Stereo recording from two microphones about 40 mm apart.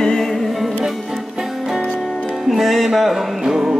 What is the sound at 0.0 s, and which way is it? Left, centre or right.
Music, centre.